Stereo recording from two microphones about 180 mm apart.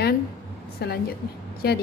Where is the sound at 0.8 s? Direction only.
65° left (ahead or behind).